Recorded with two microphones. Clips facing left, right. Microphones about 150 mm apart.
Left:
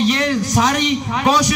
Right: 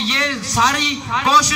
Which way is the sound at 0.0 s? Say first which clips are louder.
Left 6 dB; 50° left (ahead or behind).